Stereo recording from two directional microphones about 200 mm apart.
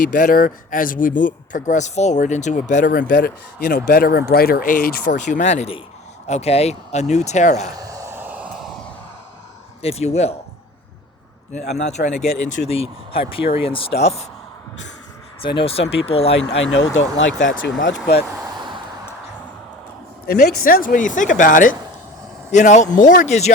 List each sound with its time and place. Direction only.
0.1 s speech: 45° left (ahead or behind)
7.8 s a sound: 15° right (ahead or behind)
9.8 s speech: 30° left (ahead or behind)
11.7 s speech: 35° left (ahead or behind)
15.9 s speech: 30° left (ahead or behind)
16.6 s speech: 65° left (ahead or behind)
20.2 s speech: 50° left (ahead or behind); by 23.5 s 35° left (ahead or behind)